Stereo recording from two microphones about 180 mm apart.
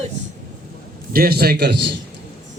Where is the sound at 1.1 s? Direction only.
60° right (ahead or behind).